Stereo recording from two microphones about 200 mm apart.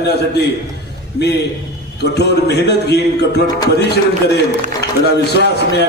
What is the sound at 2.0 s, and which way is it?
A man's voice, 55° left (ahead or behind).